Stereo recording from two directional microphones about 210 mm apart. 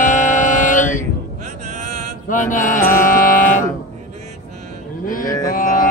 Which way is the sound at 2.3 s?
40° left (ahead or behind).